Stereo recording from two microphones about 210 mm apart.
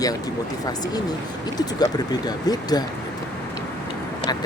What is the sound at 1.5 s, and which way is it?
Speech, 20° left (ahead or behind).